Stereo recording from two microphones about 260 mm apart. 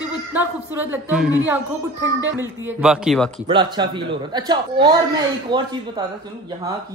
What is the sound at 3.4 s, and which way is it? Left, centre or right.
A woman's voice, centre.